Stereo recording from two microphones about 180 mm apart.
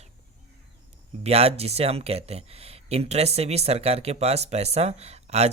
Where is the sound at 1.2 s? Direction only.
35° right (ahead or behind).